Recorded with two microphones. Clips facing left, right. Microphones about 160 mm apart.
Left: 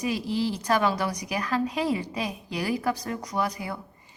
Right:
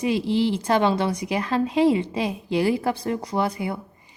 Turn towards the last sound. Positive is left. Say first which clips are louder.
# right 4 dB
turn(degrees=-25)  # may be behind; listen again after turning